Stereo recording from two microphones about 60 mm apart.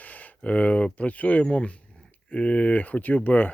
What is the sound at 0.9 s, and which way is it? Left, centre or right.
Speech, left.